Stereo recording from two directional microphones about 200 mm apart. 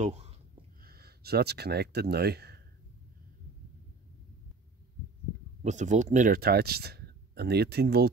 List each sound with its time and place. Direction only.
0.0 s a sound: 30° right (ahead or behind)
0.8 s speech: 50° right (ahead or behind)
5.6 s speech: 35° right (ahead or behind); by 8.1 s 55° right (ahead or behind)